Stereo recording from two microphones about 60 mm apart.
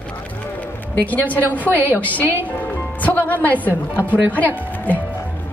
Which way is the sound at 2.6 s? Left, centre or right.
Left.